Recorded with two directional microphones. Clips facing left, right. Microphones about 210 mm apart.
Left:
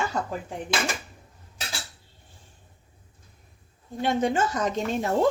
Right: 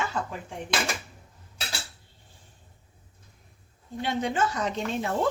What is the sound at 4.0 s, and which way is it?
Speech, 45° left (ahead or behind).